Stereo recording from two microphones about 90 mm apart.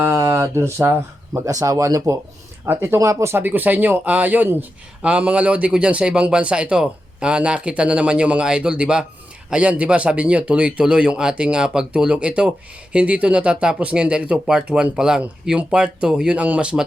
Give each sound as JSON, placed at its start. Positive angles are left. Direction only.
{"t": 0.1, "sound": "speech", "side_deg": -30}
{"t": 2.6, "sound": "speech", "side_deg": -25}